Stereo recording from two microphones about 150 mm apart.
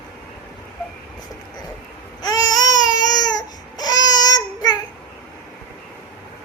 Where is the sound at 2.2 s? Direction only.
25° left (ahead or behind).